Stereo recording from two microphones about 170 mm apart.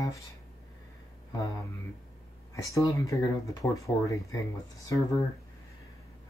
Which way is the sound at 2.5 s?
20° left (ahead or behind).